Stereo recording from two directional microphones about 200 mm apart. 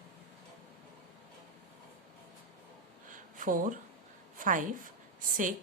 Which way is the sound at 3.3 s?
40° right (ahead or behind).